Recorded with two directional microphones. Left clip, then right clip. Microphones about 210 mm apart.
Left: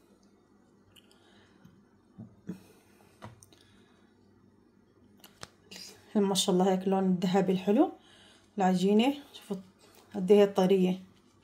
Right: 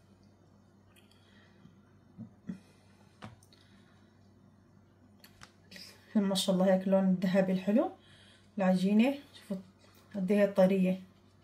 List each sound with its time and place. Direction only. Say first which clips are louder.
5.4 s speech: left 4 dB; 35° left (ahead or behind)